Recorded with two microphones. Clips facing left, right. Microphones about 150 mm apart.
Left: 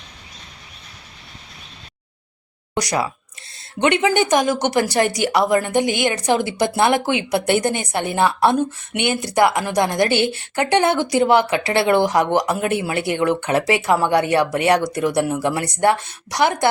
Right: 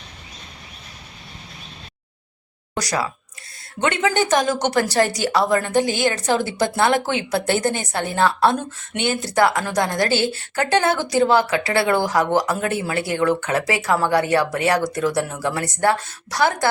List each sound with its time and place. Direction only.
2.7 s a woman's voice: 20° left (ahead or behind)